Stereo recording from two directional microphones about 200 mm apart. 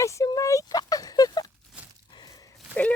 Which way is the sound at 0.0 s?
15° left (ahead or behind).